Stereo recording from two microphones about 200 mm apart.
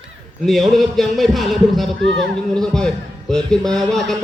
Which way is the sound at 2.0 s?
65° right (ahead or behind).